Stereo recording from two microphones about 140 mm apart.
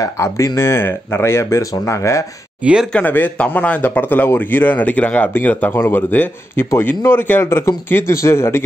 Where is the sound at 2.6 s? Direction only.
10° right (ahead or behind).